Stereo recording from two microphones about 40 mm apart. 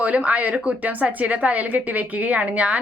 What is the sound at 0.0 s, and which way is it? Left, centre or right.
Speech, right.